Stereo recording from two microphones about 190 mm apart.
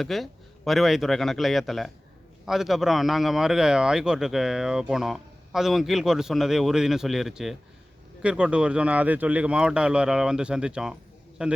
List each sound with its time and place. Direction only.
0.0 s a man's voice: centre (ahead or behind)